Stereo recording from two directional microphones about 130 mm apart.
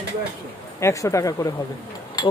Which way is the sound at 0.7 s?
20° left (ahead or behind).